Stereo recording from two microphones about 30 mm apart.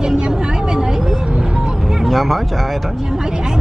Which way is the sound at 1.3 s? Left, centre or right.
Right.